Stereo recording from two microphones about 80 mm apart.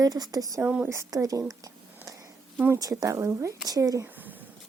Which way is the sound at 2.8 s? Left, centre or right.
Right.